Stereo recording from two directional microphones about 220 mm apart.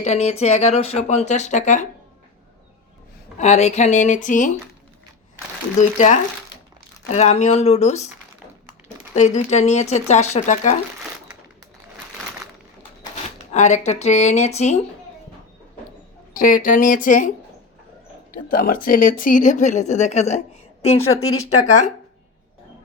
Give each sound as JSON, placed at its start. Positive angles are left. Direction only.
{"t": 0.0, "sound": "speech", "side_deg": 30}
{"t": 3.3, "sound": "speech", "side_deg": 30}
{"t": 7.1, "sound": "speech", "side_deg": 30}
{"t": 9.1, "sound": "speech", "side_deg": 30}
{"t": 13.5, "sound": "speech", "side_deg": 30}
{"t": 16.3, "sound": "speech", "side_deg": 40}
{"t": 18.3, "sound": "speech", "side_deg": 40}
{"t": 21.1, "sound": "speech", "side_deg": 70}
{"t": 21.6, "sound": "speech", "side_deg": 35}